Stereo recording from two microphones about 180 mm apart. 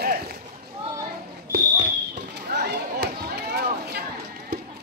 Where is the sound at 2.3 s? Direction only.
60° right (ahead or behind).